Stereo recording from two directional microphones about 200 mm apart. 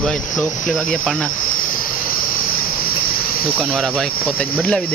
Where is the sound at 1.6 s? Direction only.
45° left (ahead or behind).